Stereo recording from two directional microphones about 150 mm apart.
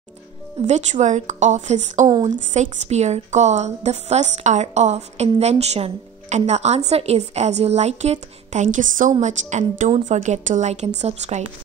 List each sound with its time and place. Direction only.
0.7 s a woman's voice: 50° right (ahead or behind)